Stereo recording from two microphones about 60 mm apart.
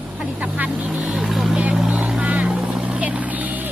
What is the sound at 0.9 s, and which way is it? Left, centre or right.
Speech, centre.